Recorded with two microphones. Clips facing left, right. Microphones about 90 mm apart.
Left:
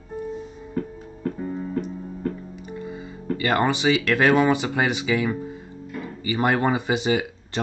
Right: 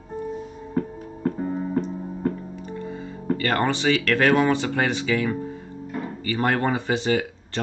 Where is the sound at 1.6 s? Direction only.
30° right (ahead or behind).